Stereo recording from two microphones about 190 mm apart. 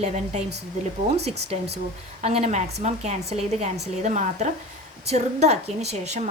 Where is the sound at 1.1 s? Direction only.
35° right (ahead or behind).